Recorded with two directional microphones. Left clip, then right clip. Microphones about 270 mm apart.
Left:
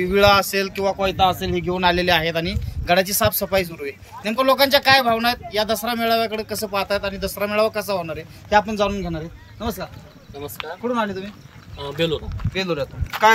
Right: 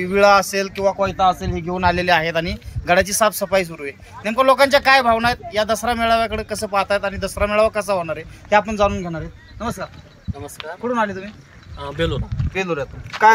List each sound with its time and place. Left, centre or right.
0.0 s speech: centre
12.5 s speech: centre
13.1 s speech: centre